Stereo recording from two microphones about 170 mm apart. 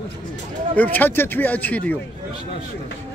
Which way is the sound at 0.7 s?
10° left (ahead or behind).